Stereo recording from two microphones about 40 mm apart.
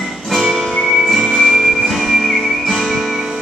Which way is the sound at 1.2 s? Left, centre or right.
Centre.